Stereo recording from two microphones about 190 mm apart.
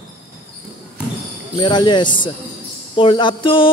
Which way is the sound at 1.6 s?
25° left (ahead or behind).